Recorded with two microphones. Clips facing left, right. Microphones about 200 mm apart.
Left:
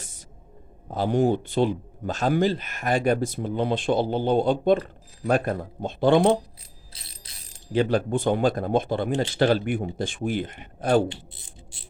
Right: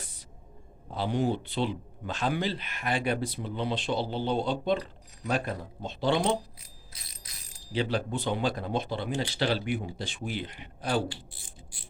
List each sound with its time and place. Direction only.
0.9 s speech: 45° left (ahead or behind)
6.9 s bicycle bell: 30° left (ahead or behind)
7.7 s speech: 50° left (ahead or behind)
11.1 s music: 20° left (ahead or behind)